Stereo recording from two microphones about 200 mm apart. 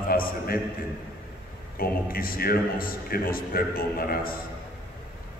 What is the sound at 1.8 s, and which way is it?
A man's voice, 50° left (ahead or behind).